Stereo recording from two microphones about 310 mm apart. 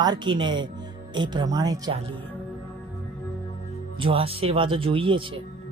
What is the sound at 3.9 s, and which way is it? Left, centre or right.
Speech, centre.